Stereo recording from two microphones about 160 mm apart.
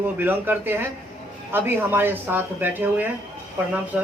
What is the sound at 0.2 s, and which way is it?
Speech, 10° right (ahead or behind).